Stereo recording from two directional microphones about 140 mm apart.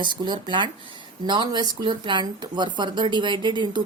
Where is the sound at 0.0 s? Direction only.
35° right (ahead or behind).